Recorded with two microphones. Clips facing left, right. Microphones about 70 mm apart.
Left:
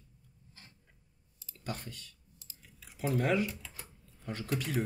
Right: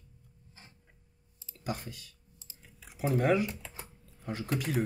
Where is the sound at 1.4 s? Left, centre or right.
Centre.